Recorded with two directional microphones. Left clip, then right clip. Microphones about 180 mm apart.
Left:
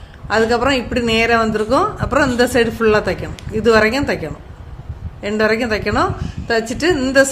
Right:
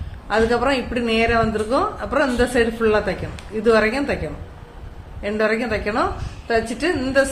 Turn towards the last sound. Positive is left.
turn(degrees=40)  # may be behind; listen again after turning